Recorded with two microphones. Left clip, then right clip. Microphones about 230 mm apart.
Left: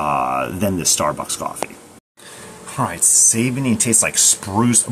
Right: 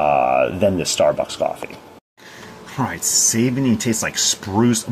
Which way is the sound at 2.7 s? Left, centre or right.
Centre.